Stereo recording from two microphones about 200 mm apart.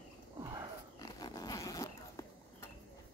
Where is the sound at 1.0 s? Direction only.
20° left (ahead or behind).